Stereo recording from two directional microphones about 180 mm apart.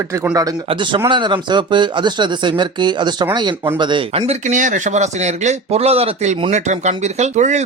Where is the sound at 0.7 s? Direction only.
30° right (ahead or behind).